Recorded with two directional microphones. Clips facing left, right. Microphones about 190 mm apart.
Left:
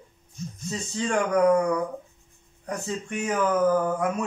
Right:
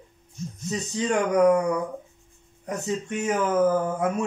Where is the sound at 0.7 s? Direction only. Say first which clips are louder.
Right 2 dB; 20° right (ahead or behind).